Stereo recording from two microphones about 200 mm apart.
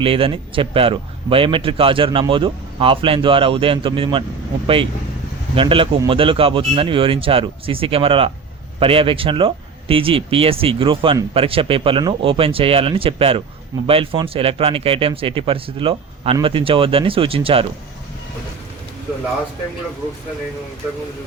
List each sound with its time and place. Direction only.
0.0 s a man's voice: 25° right (ahead or behind)